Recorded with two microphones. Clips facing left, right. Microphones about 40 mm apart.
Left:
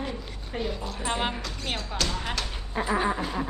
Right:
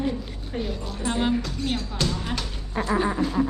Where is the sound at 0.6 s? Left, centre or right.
Centre.